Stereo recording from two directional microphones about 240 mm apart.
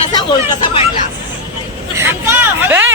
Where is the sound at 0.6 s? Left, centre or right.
Left.